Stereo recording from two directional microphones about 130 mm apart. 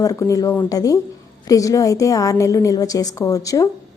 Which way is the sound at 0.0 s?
25° left (ahead or behind).